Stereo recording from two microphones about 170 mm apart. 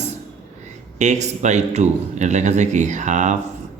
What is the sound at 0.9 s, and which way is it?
A man's voice, 45° right (ahead or behind).